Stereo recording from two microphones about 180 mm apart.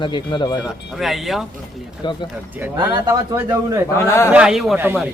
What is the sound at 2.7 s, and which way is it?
Speech, 25° right (ahead or behind).